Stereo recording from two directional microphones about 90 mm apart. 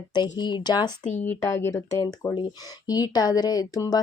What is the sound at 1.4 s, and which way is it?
Speech, 35° left (ahead or behind).